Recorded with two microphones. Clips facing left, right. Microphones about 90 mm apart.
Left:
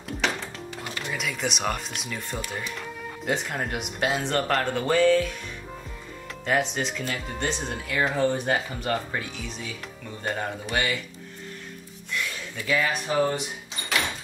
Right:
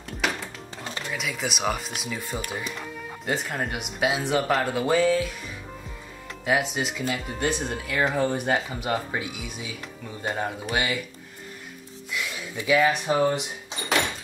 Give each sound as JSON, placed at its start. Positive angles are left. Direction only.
{"t": 0.2, "sound": "music", "side_deg": -5}
{"t": 1.1, "sound": "speech", "side_deg": 0}
{"t": 6.4, "sound": "speech", "side_deg": -5}
{"t": 12.1, "sound": "music", "side_deg": -10}
{"t": 12.5, "sound": "speech", "side_deg": -15}